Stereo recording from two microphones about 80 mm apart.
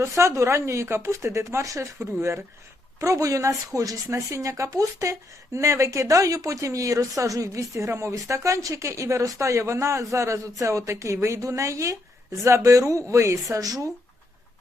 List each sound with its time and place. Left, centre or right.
0.0 s speech: right